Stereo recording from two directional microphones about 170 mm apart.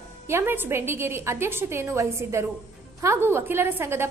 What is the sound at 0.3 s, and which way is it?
A woman's voice, 15° right (ahead or behind).